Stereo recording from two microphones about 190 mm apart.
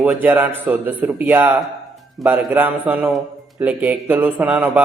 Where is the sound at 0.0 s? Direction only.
10° right (ahead or behind).